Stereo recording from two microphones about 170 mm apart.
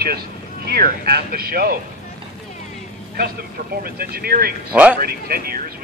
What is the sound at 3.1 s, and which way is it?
Speech, 60° right (ahead or behind).